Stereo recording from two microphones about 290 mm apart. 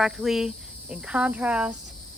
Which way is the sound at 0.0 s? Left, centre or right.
Centre.